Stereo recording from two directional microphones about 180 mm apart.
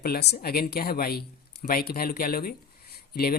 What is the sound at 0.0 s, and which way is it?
Speech, 60° left (ahead or behind).